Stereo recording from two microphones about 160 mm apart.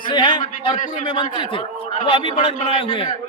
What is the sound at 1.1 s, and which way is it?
Speech, 30° left (ahead or behind).